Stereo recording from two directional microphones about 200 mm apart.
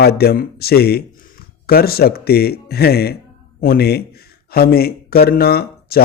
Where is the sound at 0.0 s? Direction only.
50° left (ahead or behind).